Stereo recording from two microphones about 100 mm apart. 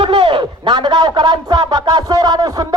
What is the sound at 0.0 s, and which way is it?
Speech, 60° right (ahead or behind).